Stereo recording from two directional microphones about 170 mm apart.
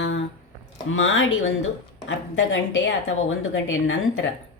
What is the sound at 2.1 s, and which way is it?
Speech, 90° left.